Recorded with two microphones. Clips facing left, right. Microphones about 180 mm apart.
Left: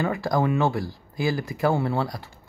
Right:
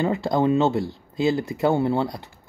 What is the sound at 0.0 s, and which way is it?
Speech, 25° right (ahead or behind).